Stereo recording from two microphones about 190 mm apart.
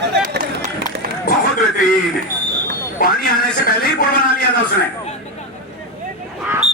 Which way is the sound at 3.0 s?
50° left (ahead or behind).